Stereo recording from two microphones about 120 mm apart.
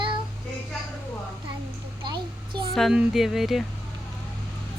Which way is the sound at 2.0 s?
40° right (ahead or behind).